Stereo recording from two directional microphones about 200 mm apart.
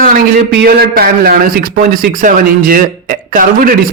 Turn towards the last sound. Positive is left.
turn(degrees=-45)  # may be behind; listen again after turning